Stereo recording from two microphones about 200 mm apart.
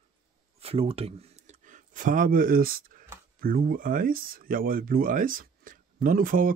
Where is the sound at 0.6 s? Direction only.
30° right (ahead or behind); by 3.1 s 45° right (ahead or behind).